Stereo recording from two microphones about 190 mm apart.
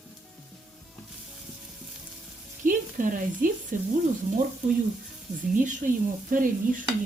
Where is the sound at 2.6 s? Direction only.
45° right (ahead or behind).